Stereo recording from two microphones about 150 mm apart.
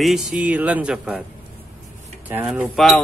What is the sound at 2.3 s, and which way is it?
Speech, 15° right (ahead or behind).